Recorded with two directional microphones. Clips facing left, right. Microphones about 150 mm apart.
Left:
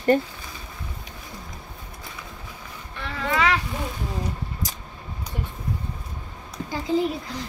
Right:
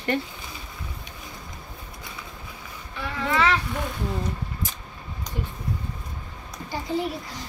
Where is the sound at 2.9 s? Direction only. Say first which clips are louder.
Right 2 dB; 5° right (ahead or behind).